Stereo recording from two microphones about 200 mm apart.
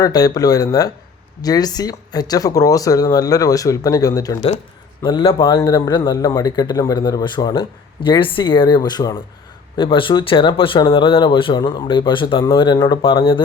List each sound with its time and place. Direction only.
0.0 s a man's voice: 20° left (ahead or behind)